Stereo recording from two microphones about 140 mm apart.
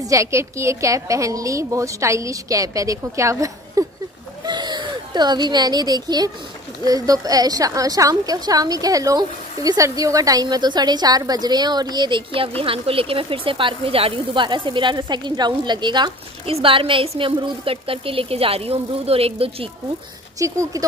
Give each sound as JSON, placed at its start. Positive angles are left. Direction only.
{"t": 0.0, "sound": "a woman's voice", "side_deg": -20}
{"t": 20.3, "sound": "a woman's voice", "side_deg": -25}